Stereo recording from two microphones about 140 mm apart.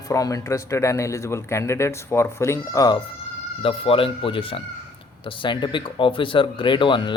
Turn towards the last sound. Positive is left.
turn(degrees=35)  # may be behind; listen again after turning